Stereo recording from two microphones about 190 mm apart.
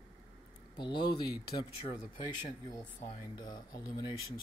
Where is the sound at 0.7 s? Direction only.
25° left (ahead or behind).